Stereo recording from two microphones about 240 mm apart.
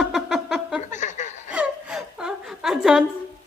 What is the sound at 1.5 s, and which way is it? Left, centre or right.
Whimper, centre.